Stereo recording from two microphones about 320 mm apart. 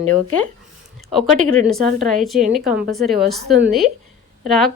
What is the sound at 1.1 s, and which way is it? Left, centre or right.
Speech, centre.